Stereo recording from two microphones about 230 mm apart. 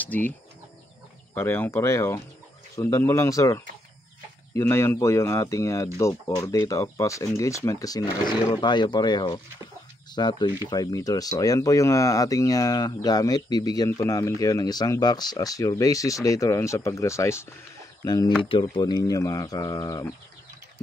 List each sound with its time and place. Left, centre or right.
0.0 s speech: centre
1.3 s speech: centre